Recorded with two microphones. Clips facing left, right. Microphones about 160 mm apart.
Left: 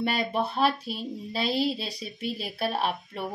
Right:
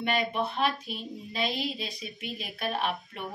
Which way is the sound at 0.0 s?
35° left (ahead or behind).